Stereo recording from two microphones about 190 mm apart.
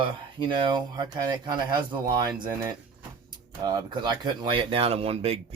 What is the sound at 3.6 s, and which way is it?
Speech, 20° right (ahead or behind).